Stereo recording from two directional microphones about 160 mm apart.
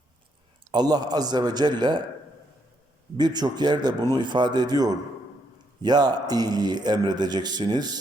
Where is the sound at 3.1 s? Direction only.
25° right (ahead or behind).